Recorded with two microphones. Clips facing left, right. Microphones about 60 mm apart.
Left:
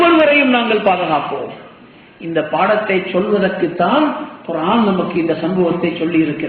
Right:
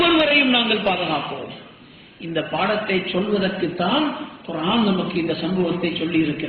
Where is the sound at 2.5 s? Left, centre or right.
Left.